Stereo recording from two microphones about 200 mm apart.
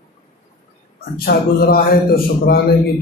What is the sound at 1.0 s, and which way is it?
A man's voice, 50° left (ahead or behind).